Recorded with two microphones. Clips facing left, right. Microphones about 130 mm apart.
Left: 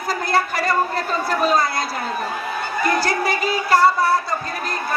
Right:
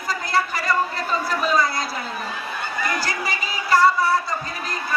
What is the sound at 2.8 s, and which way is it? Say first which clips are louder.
Music: left 8 dB; 60° left (ahead or behind).